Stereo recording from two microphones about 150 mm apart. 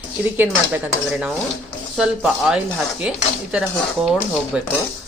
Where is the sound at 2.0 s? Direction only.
5° right (ahead or behind).